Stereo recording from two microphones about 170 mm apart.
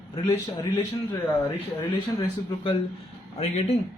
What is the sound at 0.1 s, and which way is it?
Speech, 25° left (ahead or behind).